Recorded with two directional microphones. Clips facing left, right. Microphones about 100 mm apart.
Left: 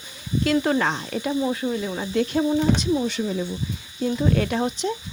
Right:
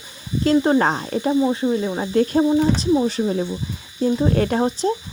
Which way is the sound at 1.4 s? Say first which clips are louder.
Right 5 dB; 25° right (ahead or behind).